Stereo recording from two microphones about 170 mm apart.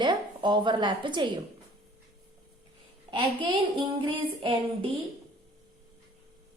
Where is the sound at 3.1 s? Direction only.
30° right (ahead or behind).